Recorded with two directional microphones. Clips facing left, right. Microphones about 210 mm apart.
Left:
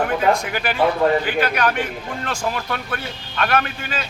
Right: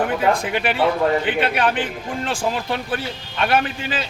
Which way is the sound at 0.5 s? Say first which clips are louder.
Even; 20° right (ahead or behind).